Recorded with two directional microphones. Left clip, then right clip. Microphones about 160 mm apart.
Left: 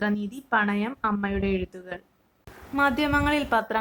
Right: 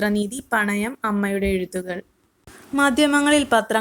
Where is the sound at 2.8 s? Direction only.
50° right (ahead or behind).